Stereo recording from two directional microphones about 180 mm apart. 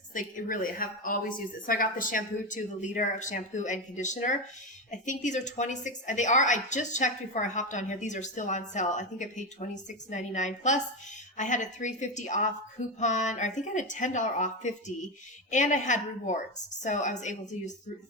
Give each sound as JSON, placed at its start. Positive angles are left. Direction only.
{"t": 0.1, "sound": "a woman's voice", "side_deg": 50}